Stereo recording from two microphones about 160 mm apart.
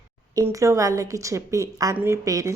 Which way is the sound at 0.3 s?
20° right (ahead or behind).